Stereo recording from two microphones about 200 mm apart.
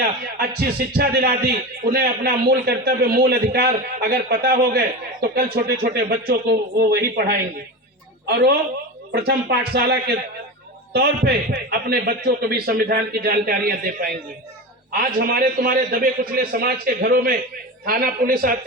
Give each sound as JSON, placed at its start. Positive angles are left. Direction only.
{"t": 0.0, "sound": "speech", "side_deg": -50}